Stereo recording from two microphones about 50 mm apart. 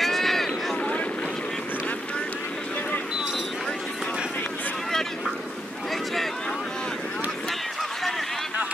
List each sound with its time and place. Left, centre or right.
0.0 s run: centre